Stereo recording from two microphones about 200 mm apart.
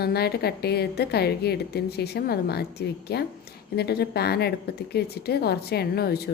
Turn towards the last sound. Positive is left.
turn(degrees=50)  # may be behind; listen again after turning